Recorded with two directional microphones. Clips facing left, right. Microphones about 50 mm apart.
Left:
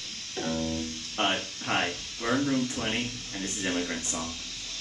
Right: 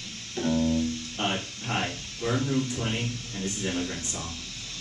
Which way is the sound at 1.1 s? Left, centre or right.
Left.